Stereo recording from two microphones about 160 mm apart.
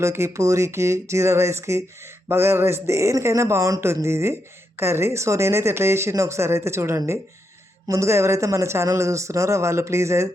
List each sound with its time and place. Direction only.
0.0 s speech: 15° right (ahead or behind)